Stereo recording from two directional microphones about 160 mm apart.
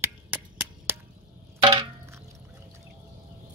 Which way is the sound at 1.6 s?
30° right (ahead or behind).